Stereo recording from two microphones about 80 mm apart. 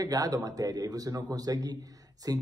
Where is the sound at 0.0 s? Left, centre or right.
Right.